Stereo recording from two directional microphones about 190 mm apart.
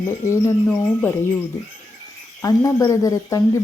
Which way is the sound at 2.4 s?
15° left (ahead or behind).